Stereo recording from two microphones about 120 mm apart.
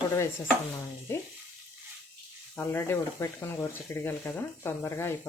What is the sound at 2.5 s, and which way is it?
Speech, 20° left (ahead or behind).